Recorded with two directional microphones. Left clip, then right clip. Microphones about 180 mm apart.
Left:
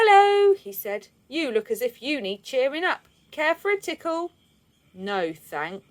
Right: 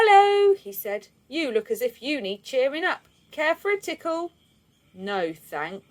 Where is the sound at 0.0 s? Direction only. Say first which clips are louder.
Even; 25° left (ahead or behind).